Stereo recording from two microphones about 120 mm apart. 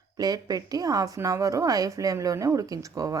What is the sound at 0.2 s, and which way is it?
Speech, 30° right (ahead or behind).